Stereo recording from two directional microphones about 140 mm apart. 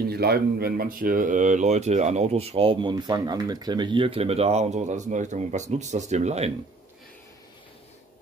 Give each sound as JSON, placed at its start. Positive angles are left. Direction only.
{"t": 0.2, "sound": "a man's voice", "side_deg": -90}